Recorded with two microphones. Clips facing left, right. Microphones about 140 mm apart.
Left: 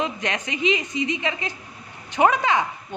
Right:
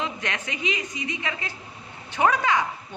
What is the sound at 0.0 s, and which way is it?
A woman's voice, 20° left (ahead or behind).